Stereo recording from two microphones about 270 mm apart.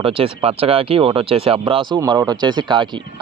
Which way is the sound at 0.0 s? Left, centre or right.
Right.